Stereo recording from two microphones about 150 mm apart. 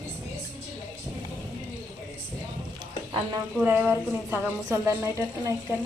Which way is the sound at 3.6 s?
10° right (ahead or behind).